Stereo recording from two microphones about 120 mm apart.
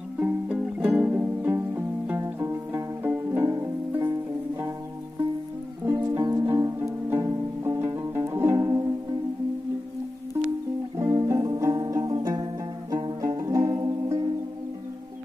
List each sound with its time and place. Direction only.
0.2 s music: 10° right (ahead or behind); by 4.0 s 25° right (ahead or behind)
5.9 s music: 35° right (ahead or behind)
11.0 s music: 25° right (ahead or behind)